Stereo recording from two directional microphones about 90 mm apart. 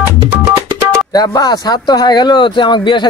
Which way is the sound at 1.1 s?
45° left (ahead or behind).